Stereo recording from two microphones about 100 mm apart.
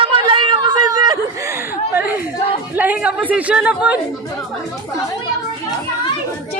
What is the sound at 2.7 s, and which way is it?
Speech, 15° right (ahead or behind).